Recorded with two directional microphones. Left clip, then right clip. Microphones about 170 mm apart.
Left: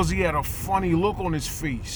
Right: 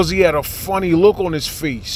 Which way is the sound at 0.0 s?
25° right (ahead or behind).